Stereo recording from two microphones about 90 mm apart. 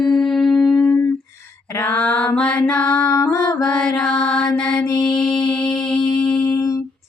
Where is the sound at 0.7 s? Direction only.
20° left (ahead or behind).